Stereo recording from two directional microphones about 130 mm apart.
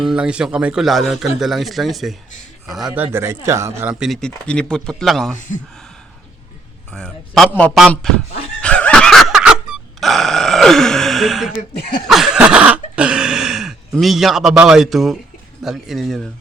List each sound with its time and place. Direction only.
0.0 s a man's voice: 5° right (ahead or behind)
2.9 s speech: 15° right (ahead or behind)
3.8 s a man's voice: 5° right (ahead or behind)
4.2 s a man's voice: 5° left (ahead or behind)
6.9 s a man's voice: 5° left (ahead or behind)
8.6 s dog: 10° left (ahead or behind)
12.0 s a sound: centre (ahead or behind)
15.6 s a man's voice: centre (ahead or behind)